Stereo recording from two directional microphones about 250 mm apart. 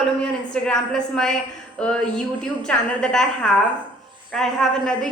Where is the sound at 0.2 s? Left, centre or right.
Centre.